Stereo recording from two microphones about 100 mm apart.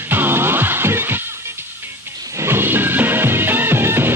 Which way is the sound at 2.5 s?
20° right (ahead or behind).